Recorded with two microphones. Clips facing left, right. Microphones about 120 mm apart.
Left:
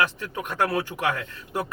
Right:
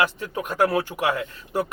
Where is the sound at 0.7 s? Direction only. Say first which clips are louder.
Right 3 dB; 20° right (ahead or behind).